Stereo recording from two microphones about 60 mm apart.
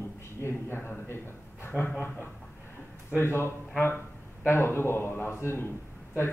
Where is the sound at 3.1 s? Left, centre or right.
Left.